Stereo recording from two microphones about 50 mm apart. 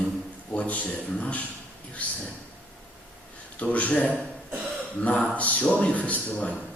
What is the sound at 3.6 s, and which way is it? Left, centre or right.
A man's voice, left.